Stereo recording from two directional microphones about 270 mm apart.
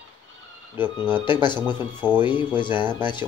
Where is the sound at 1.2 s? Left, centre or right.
Centre.